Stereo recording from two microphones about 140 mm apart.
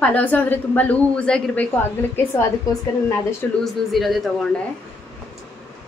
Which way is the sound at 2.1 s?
20° left (ahead or behind).